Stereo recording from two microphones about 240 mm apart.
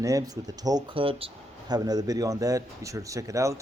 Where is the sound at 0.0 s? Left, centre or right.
Centre.